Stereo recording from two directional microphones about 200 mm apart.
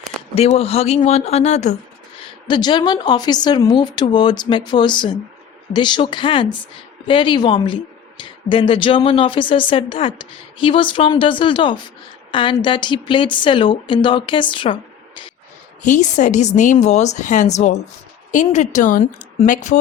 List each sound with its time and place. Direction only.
0.3 s speech: 30° left (ahead or behind)
2.5 s a woman's voice: 20° left (ahead or behind)
15.8 s speech: 40° left (ahead or behind)